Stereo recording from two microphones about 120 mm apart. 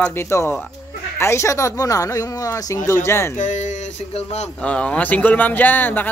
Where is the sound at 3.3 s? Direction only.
90° left; by 4.5 s 65° left (ahead or behind).